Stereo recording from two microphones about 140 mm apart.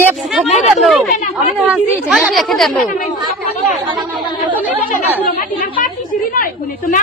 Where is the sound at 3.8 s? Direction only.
35° right (ahead or behind).